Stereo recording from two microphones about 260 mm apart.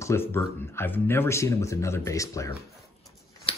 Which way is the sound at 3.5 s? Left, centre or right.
Left.